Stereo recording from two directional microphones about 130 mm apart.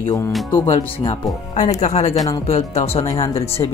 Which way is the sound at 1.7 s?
60° left (ahead or behind).